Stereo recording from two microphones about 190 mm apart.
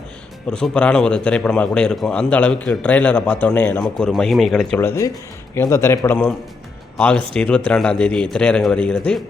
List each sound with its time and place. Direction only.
0.5 s a man's voice: 5° left (ahead or behind)
4.9 s a man's voice: 15° left (ahead or behind)